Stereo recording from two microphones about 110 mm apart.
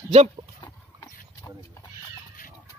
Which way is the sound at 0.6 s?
35° left (ahead or behind).